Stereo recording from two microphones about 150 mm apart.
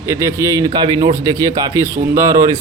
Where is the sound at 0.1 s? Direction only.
20° right (ahead or behind).